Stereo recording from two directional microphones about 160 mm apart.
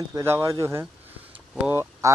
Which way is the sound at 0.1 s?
15° right (ahead or behind).